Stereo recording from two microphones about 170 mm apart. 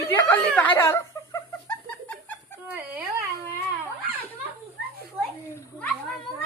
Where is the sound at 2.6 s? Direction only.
10° right (ahead or behind).